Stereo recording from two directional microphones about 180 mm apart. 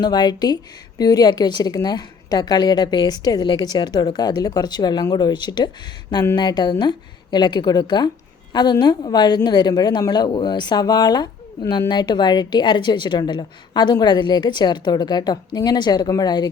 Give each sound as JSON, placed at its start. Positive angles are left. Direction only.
{"t": 0.0, "sound": "a woman's voice", "side_deg": 25}